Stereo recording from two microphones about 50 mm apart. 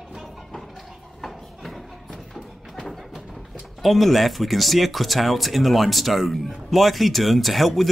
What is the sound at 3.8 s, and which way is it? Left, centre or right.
Speech, centre.